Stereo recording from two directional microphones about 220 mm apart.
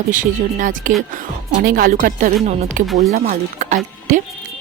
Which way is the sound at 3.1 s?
35° right (ahead or behind).